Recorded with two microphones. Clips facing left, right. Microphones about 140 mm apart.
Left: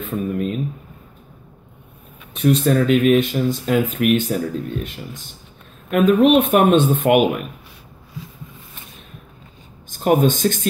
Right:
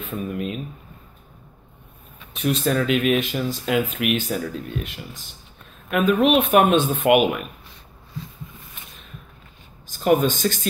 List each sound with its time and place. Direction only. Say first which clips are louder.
0.1 s speech: left 5 dB; 45° left (ahead or behind)
2.3 s speech: left 5 dB; 55° left (ahead or behind)
9.8 s speech: left 2 dB; 50° left (ahead or behind)